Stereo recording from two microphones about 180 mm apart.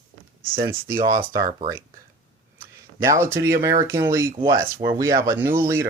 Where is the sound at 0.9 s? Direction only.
50° right (ahead or behind).